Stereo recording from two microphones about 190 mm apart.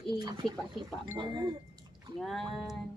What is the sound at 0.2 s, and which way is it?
Speech, 20° right (ahead or behind).